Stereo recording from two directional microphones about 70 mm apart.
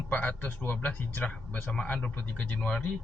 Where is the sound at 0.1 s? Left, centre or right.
Left.